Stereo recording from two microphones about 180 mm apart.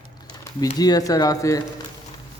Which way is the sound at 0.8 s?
20° left (ahead or behind).